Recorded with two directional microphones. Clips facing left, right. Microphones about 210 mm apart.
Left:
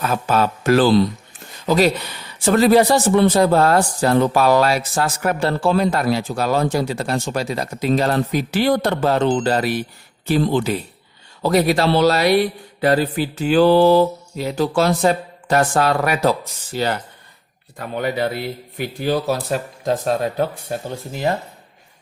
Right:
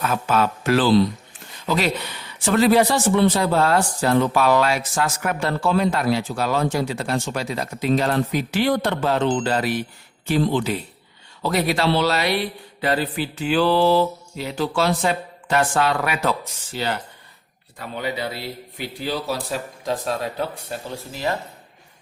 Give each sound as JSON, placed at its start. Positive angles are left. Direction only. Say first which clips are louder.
{"t": 0.0, "sound": "a man's voice", "louder": "left 2 dB", "side_deg": 35}